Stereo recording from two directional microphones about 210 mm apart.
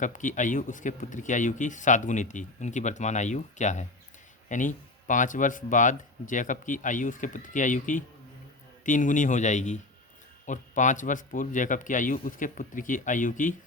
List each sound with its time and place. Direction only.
0.0 s speech: 35° left (ahead or behind)